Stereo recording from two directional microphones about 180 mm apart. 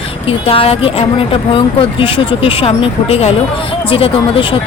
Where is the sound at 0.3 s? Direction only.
30° left (ahead or behind).